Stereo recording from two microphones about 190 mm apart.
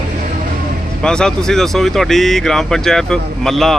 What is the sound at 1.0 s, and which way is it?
Speech, 5° left (ahead or behind).